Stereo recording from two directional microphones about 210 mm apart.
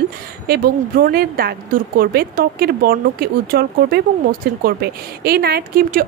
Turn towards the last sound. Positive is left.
turn(degrees=-45)  # may be behind; listen again after turning